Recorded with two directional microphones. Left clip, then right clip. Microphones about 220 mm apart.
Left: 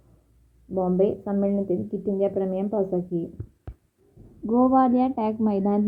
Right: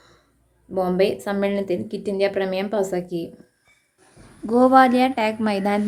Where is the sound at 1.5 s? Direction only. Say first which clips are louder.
Right 1 dB; 35° right (ahead or behind).